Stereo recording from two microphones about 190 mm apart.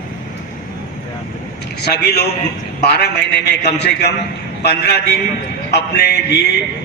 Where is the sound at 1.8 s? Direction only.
60° left (ahead or behind).